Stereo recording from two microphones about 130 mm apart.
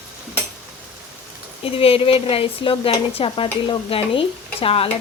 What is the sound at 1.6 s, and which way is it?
A woman's voice, 45° left (ahead or behind).